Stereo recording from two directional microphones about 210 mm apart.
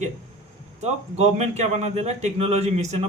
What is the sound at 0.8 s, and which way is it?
Speech, 30° right (ahead or behind).